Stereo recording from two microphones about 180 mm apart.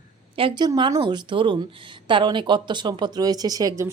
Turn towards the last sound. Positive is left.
turn(degrees=-20)  # may be behind; listen again after turning